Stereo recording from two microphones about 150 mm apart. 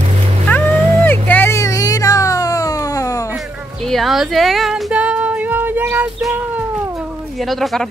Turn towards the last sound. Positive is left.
turn(degrees=0)  # may be behind; listen again after turning